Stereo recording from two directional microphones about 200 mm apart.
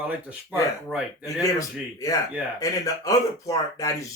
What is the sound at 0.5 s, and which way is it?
Speech, 5° right (ahead or behind).